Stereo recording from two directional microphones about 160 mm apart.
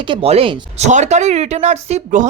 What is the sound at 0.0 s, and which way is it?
Speech, 35° right (ahead or behind).